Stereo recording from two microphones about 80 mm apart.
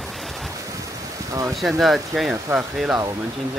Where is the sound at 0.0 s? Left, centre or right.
Centre.